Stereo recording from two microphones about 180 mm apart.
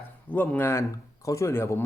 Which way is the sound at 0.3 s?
10° left (ahead or behind).